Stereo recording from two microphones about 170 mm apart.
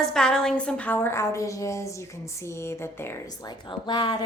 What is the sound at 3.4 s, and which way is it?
Speech, 25° left (ahead or behind).